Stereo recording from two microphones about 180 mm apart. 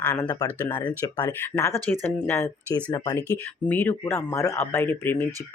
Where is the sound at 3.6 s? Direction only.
10° left (ahead or behind).